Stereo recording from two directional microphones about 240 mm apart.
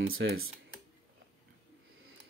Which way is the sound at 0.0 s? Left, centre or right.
Right.